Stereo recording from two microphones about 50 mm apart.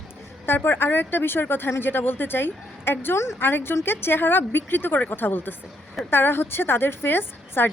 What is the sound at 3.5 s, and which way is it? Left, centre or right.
A woman's voice, left.